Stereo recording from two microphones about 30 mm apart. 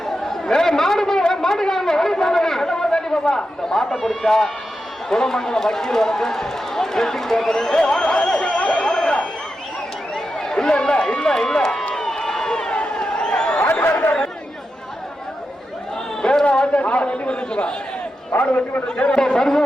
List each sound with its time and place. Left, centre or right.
0.0 s chatter: left
0.8 s a sound: centre
2.1 s chatter: centre
2.9 s a man's voice: left
10.3 s run: centre
11.0 s speech: left
11.9 s run: centre
12.7 s a sound: left
16.2 s a sound: left
16.5 s a man's voice: left
19.4 s speech: centre